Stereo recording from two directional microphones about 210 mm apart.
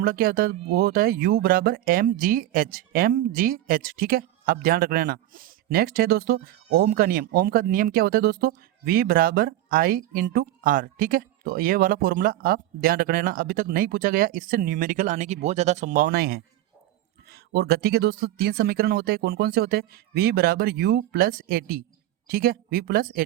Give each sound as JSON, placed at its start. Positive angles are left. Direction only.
{"t": 0.0, "sound": "speech", "side_deg": -45}